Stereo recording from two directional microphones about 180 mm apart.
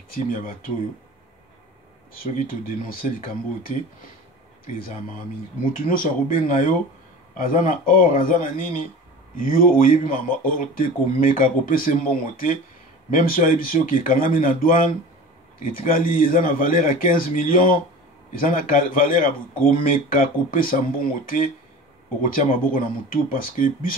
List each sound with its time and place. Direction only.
0.1 s speech: 50° left (ahead or behind)
2.1 s speech: 50° left (ahead or behind)
5.7 s speech: 50° left (ahead or behind)
22.2 s speech: 50° left (ahead or behind)